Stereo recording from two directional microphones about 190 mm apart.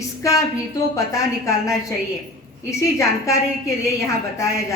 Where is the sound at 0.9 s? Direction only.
15° left (ahead or behind).